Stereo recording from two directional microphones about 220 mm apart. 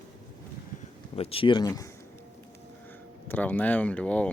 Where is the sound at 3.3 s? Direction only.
10° left (ahead or behind).